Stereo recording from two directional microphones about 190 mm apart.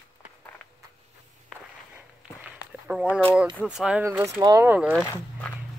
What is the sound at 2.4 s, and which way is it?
Walk, 5° right (ahead or behind).